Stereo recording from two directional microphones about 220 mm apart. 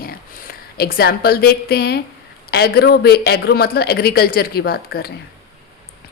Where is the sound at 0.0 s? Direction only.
40° left (ahead or behind).